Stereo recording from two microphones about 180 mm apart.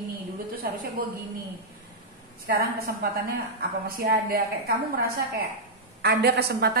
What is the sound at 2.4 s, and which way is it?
A woman's voice, 60° right (ahead or behind).